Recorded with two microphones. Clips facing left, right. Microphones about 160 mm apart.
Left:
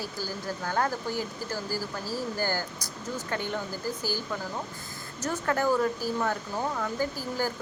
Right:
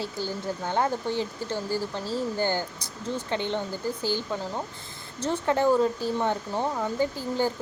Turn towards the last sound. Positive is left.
turn(degrees=-25)  # may be behind; listen again after turning